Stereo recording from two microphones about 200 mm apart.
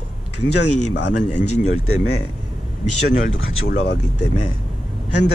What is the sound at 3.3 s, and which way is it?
Speech, 70° left (ahead or behind).